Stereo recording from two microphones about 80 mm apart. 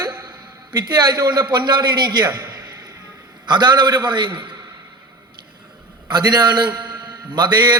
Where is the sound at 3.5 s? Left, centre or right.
Right.